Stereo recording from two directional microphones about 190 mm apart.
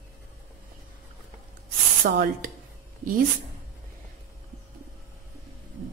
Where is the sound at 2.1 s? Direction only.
60° right (ahead or behind).